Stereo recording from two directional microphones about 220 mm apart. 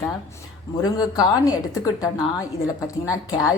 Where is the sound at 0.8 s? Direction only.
15° left (ahead or behind).